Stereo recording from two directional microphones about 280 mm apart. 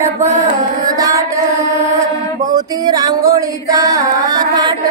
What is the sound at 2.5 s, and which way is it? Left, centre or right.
Music, centre.